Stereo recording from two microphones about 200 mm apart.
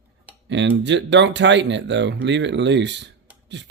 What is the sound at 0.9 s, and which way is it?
Speech, 60° right (ahead or behind).